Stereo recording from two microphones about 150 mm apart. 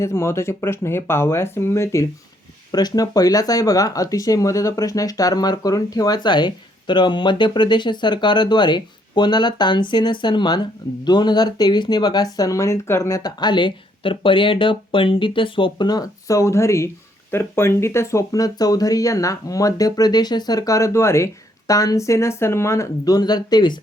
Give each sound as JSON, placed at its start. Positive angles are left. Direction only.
{"t": 0.0, "sound": "speech", "side_deg": 20}